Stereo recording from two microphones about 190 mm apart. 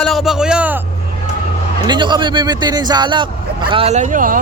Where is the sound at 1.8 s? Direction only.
25° right (ahead or behind); by 4.4 s 45° right (ahead or behind).